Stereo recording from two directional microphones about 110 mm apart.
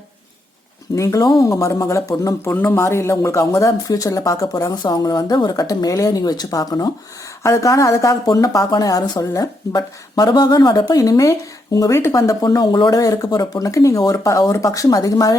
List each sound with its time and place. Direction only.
0.9 s speech: 30° left (ahead or behind)